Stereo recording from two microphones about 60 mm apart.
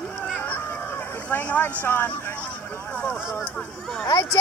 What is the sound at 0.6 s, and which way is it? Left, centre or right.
Hubbub, left.